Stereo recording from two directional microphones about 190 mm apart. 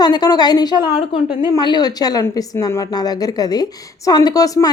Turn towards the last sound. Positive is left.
turn(degrees=20)  # may be behind; listen again after turning